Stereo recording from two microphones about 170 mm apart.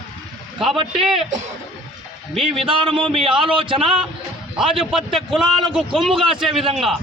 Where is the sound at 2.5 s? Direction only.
30° right (ahead or behind).